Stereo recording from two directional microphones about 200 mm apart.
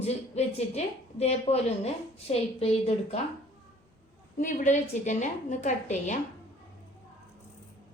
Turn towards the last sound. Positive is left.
turn(degrees=35)  # may be behind; listen again after turning